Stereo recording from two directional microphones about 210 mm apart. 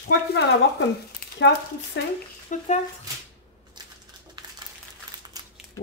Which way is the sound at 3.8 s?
20° right (ahead or behind).